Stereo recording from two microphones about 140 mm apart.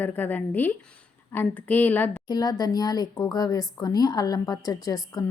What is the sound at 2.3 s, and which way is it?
A woman's voice, 25° left (ahead or behind).